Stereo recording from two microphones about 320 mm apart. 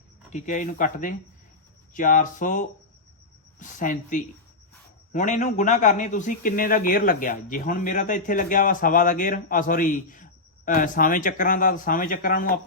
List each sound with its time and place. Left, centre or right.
0.3 s a man's voice: left